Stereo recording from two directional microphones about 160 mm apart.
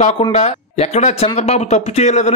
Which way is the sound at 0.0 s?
45° left (ahead or behind).